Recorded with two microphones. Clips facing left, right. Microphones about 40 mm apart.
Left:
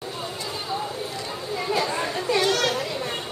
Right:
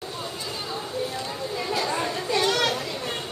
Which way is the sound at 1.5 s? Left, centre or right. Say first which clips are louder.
Left 2 dB; centre.